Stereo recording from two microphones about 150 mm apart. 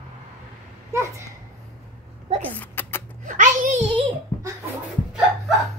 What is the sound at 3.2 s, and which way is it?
Music, 60° right (ahead or behind).